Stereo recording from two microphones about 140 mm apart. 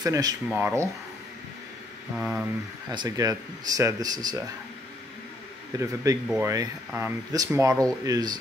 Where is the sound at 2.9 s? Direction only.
25° right (ahead or behind).